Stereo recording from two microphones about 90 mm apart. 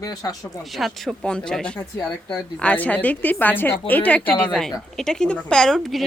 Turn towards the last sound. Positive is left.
turn(degrees=5)  # may be behind; listen again after turning